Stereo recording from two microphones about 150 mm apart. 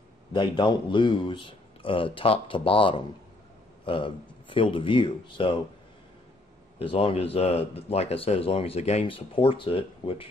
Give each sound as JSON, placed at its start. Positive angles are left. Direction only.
{"t": 0.3, "sound": "speech", "side_deg": 30}
{"t": 6.8, "sound": "speech", "side_deg": 35}